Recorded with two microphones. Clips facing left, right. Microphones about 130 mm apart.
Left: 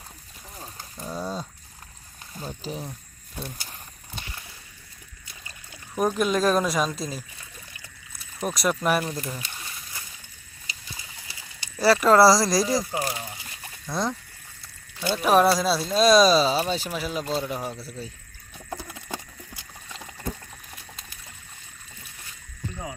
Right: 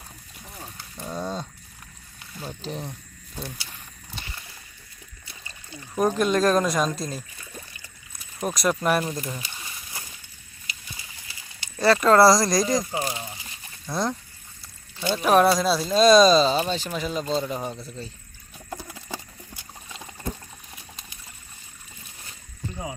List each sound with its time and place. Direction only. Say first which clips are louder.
0.9 s a sound: right 1 dB; 5° left (ahead or behind)
2.4 s speech: even; 5° left (ahead or behind)
3.6 s keys jangling: left 1 dB; 45° left (ahead or behind)
5.5 s speech: right 4 dB; 5° left (ahead or behind)
8.4 s speech: right 1 dB; centre (ahead or behind)
11.8 s speech: even; 5° left (ahead or behind)